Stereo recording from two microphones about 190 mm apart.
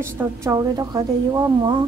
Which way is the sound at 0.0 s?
15° right (ahead or behind).